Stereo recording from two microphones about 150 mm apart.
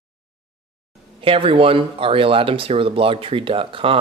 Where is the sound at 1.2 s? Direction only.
35° right (ahead or behind).